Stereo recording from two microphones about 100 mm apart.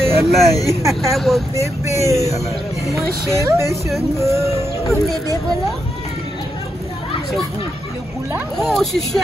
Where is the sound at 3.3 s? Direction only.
30° right (ahead or behind).